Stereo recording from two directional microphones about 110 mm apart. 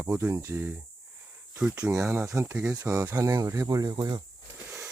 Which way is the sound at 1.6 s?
10° right (ahead or behind).